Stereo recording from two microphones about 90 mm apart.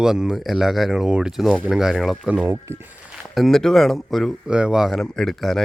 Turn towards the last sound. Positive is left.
turn(degrees=0)  # may be behind; listen again after turning